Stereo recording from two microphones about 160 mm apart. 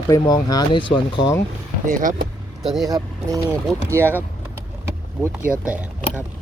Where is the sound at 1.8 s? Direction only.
55° right (ahead or behind).